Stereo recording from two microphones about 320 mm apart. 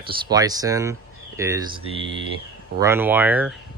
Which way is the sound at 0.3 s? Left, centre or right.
Centre.